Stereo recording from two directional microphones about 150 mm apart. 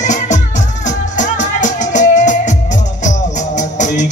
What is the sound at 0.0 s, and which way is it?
Music, 55° left (ahead or behind).